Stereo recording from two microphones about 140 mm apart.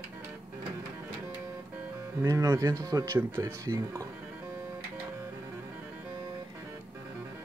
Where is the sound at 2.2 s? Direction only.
25° right (ahead or behind).